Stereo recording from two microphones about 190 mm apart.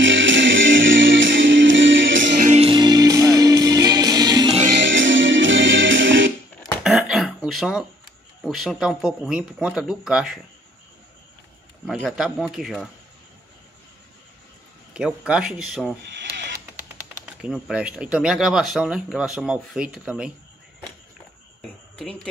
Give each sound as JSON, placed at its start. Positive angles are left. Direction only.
{"t": 0.0, "sound": "music", "side_deg": -80}
{"t": 2.4, "sound": "music", "side_deg": -35}
{"t": 2.7, "sound": "music", "side_deg": -20}
{"t": 4.7, "sound": "music", "side_deg": -75}
{"t": 6.8, "sound": "throat clearing", "side_deg": 0}
{"t": 8.5, "sound": "speech", "side_deg": 0}
{"t": 11.8, "sound": "speech", "side_deg": 0}
{"t": 15.0, "sound": "speech", "side_deg": -5}
{"t": 16.0, "sound": "a sound", "side_deg": -65}
{"t": 17.3, "sound": "speech", "side_deg": -5}
{"t": 21.5, "sound": "speech", "side_deg": 0}